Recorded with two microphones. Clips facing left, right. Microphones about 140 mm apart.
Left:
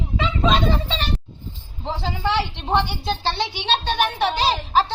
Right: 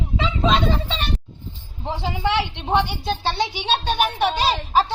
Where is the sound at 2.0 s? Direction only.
15° right (ahead or behind).